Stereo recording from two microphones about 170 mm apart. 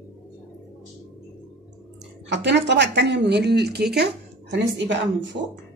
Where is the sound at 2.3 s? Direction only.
90° right.